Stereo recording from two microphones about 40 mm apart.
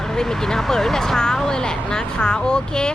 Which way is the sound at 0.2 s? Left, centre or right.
Centre.